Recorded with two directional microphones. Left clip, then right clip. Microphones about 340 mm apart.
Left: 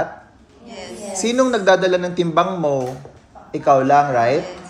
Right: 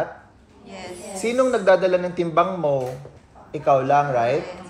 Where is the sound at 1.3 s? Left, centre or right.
Centre.